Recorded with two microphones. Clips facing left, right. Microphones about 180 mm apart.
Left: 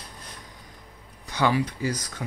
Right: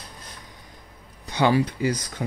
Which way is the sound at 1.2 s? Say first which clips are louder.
Right 3 dB; 25° right (ahead or behind).